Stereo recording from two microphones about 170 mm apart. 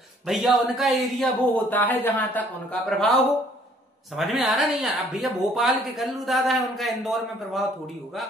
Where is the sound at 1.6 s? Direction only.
10° left (ahead or behind).